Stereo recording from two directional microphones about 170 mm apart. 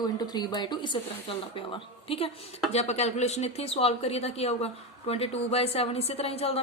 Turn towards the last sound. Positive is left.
turn(degrees=35)  # may be behind; listen again after turning